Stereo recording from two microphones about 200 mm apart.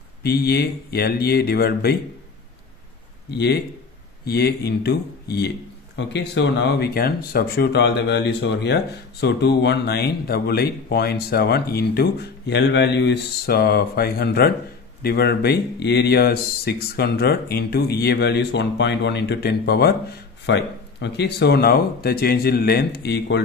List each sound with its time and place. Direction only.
0.2 s speech: 50° left (ahead or behind)
3.3 s speech: 60° left (ahead or behind)